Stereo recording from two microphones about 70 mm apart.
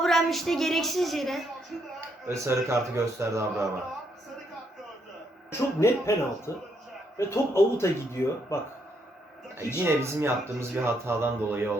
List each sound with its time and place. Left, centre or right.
0.0 s a woman's voice: centre
2.0 s speech: right
5.5 s speech: left
9.8 s speech: right